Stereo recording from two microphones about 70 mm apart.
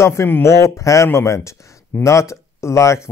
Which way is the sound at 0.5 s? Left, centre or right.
Left.